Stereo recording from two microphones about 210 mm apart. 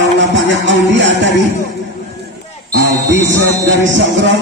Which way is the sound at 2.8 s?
60° right (ahead or behind).